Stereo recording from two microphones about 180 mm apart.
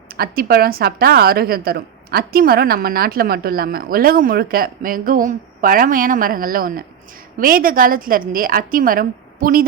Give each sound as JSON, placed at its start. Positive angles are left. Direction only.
{"t": 0.1, "sound": "a woman's voice", "side_deg": -55}